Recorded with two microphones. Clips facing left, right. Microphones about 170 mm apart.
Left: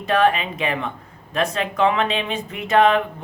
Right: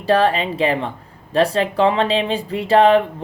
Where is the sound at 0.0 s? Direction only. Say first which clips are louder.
Right 2 dB; 30° right (ahead or behind).